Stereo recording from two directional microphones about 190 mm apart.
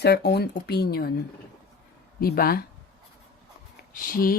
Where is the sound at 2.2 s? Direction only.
50° left (ahead or behind).